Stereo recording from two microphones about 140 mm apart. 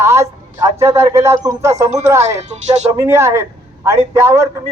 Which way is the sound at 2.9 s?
20° right (ahead or behind).